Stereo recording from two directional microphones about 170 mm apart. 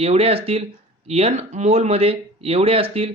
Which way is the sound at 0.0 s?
35° right (ahead or behind).